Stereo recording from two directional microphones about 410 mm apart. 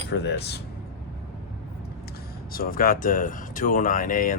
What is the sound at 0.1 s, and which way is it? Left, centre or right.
Speech, left.